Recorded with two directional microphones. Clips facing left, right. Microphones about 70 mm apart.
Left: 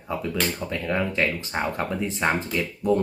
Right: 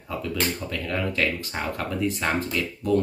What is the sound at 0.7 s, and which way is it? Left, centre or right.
Speech, left.